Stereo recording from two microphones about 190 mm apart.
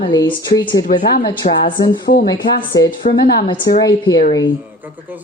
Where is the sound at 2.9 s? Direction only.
50° left (ahead or behind).